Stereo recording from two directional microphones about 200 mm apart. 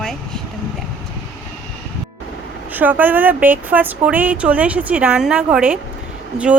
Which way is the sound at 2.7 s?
10° right (ahead or behind).